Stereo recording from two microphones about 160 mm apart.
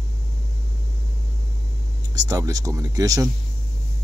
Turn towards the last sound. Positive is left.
turn(degrees=-20)  # may be behind; listen again after turning